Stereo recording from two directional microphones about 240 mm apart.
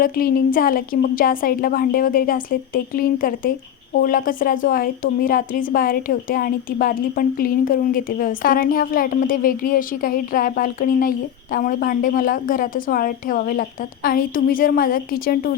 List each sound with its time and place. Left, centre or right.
0.0 s a woman's voice: left